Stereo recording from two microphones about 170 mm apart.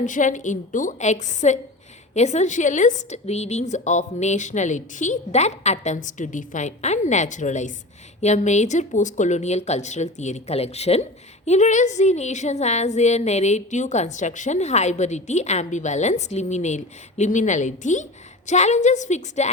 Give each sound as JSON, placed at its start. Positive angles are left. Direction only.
{"t": 0.0, "sound": "a woman's voice", "side_deg": 50}